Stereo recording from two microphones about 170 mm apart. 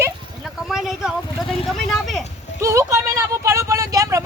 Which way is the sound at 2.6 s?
15° right (ahead or behind).